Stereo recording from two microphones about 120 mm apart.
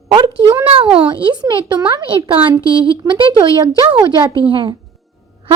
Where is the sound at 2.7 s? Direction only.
45° right (ahead or behind).